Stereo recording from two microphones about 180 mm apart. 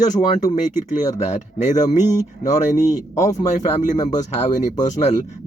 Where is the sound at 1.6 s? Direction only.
40° left (ahead or behind).